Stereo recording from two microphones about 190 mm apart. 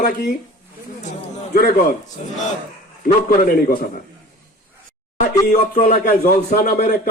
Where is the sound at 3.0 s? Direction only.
50° left (ahead or behind).